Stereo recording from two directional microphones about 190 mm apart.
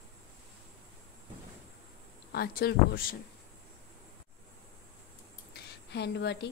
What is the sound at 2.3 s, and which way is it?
Speech, 55° left (ahead or behind).